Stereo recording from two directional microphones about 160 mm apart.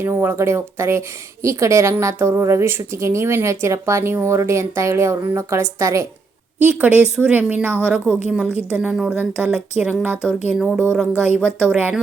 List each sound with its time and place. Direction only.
0.0 s speech: 15° right (ahead or behind)